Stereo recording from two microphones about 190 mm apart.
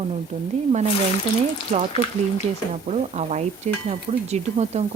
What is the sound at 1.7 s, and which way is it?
A woman's voice, 35° right (ahead or behind).